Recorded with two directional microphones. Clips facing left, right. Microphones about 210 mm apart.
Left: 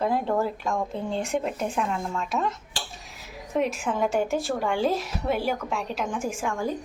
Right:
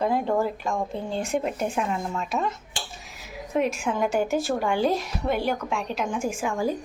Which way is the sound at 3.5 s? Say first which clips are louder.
Right 1 dB; centre (ahead or behind).